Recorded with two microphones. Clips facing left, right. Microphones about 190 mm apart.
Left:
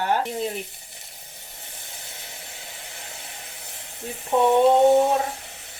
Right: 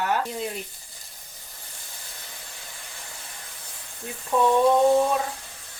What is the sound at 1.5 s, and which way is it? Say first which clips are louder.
Hiss: left 3 dB; 20° left (ahead or behind).